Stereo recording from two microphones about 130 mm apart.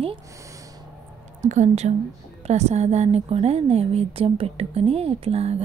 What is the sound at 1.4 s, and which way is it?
A woman's voice, 65° right (ahead or behind).